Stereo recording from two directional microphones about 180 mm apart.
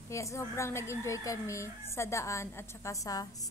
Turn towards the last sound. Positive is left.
turn(degrees=20)  # may be behind; listen again after turning